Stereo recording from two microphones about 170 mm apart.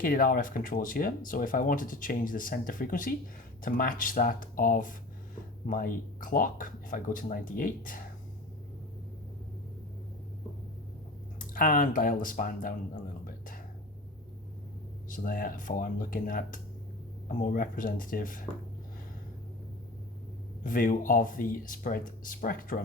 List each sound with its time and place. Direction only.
0.0 s speech: 55° left (ahead or behind)
11.3 s speech: 55° left (ahead or behind)
15.1 s speech: 55° left (ahead or behind)
20.7 s speech: 55° left (ahead or behind)